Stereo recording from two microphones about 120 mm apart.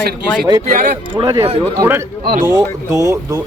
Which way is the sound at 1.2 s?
35° right (ahead or behind).